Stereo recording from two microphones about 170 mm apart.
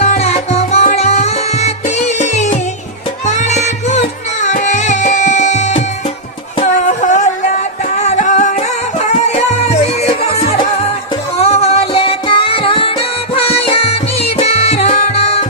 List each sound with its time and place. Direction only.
0.0 s music: 40° left (ahead or behind)